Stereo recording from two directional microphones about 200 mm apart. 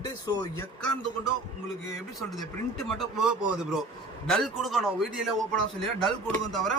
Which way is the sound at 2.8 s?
5° right (ahead or behind).